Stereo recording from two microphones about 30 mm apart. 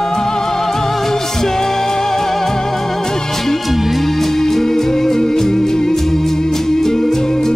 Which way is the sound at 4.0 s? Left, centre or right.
Centre.